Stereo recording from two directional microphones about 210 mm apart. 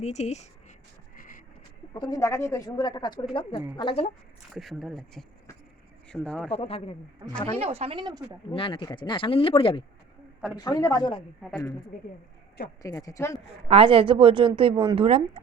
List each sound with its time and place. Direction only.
0.0 s speech: 30° left (ahead or behind)
1.1 s a sound: 40° left (ahead or behind)
1.9 s a woman's voice: 20° left (ahead or behind)
4.5 s speech: centre (ahead or behind)
6.5 s speech: 30° left (ahead or behind)
7.3 s a woman's voice: 15° left (ahead or behind)
7.6 s speech: 30° right (ahead or behind)
8.5 s speech: 25° left (ahead or behind)
12.8 s a woman's voice: 15° left (ahead or behind)
13.7 s speech: 25° right (ahead or behind)